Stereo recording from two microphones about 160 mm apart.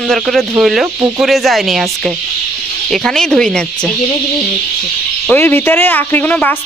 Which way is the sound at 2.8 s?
5° left (ahead or behind).